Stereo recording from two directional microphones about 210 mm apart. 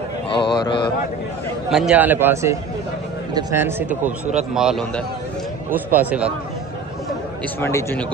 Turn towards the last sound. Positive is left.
turn(degrees=10)  # may be behind; listen again after turning